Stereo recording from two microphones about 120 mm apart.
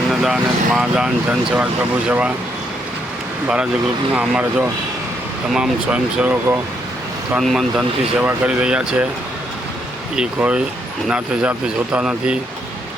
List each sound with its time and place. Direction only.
0.1 s speech: centre (ahead or behind)
4.1 s speech: 10° right (ahead or behind)
8.2 s speech: 15° right (ahead or behind)
10.2 s speech: 10° right (ahead or behind)